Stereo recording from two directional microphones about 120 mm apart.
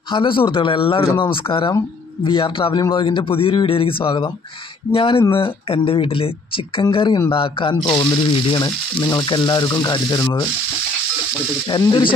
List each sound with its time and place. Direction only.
0.1 s a woman's voice: 45° left (ahead or behind)
11.6 s a woman's voice: 40° left (ahead or behind)